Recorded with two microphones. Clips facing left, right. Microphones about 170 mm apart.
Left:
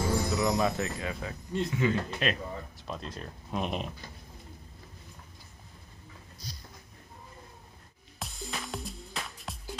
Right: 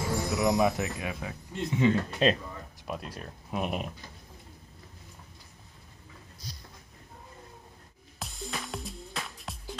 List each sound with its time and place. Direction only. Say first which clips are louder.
0.0 s music: even; centre (ahead or behind)
0.7 s speech: even; 15° right (ahead or behind)
2.9 s speech: right 2 dB; 10° right (ahead or behind)
8.2 s music: right 1 dB; centre (ahead or behind)